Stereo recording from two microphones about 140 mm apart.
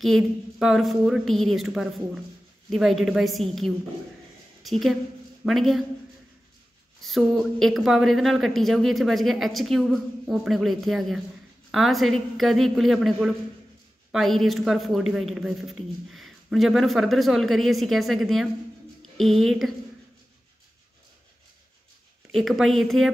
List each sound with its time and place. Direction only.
0.0 s speech: centre (ahead or behind)
7.0 s speech: centre (ahead or behind)
22.3 s speech: centre (ahead or behind)